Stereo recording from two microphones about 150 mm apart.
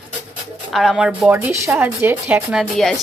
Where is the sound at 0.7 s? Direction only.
Centre (ahead or behind).